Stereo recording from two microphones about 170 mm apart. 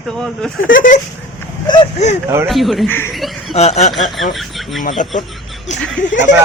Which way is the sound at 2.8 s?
15° left (ahead or behind).